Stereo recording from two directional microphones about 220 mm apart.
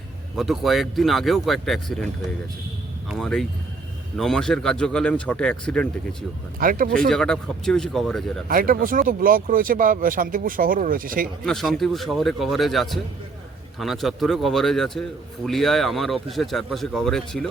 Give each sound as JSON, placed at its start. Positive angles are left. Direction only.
{"t": 0.3, "sound": "speech", "side_deg": 0}
{"t": 3.1, "sound": "speech", "side_deg": 0}
{"t": 6.6, "sound": "speech", "side_deg": -40}
{"t": 7.1, "sound": "speech", "side_deg": 5}
{"t": 8.4, "sound": "speech", "side_deg": -40}
{"t": 11.4, "sound": "speech", "side_deg": 0}